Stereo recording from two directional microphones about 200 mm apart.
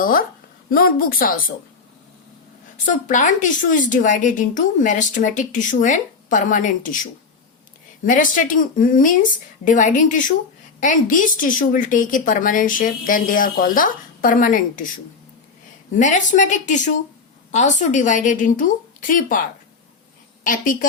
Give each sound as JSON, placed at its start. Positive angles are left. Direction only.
{"t": 0.0, "sound": "a woman's voice", "side_deg": 45}
{"t": 2.8, "sound": "a woman's voice", "side_deg": 40}
{"t": 16.0, "sound": "a woman's voice", "side_deg": 40}